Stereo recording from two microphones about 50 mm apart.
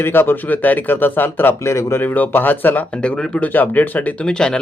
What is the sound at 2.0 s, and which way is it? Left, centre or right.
Speech, left.